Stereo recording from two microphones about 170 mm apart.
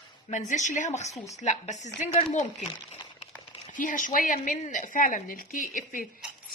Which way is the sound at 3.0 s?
30° left (ahead or behind).